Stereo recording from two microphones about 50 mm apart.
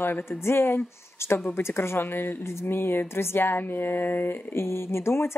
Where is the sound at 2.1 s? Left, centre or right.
Left.